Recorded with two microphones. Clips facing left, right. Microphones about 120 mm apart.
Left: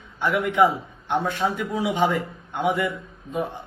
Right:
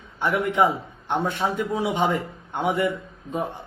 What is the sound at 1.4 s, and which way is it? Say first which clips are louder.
Speech: even; 20° right (ahead or behind).